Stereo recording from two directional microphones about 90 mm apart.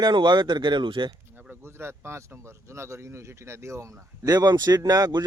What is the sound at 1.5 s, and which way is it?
Speech, 25° right (ahead or behind).